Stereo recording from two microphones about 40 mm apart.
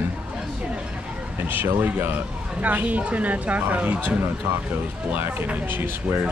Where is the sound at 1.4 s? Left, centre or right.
Right.